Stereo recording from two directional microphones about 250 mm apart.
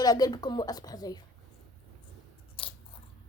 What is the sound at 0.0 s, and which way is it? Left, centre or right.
A woman's voice, centre.